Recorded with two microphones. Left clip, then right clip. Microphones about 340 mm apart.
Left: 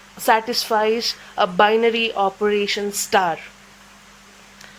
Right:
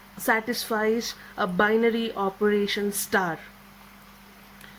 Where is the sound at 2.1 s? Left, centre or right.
Left.